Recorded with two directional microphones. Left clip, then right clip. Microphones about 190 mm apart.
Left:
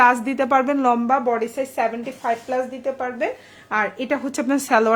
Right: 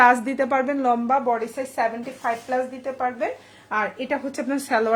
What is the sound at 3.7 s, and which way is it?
A woman's voice, 40° left (ahead or behind).